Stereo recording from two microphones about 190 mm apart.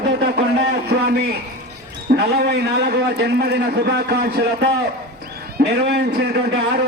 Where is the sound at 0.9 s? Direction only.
60° right (ahead or behind).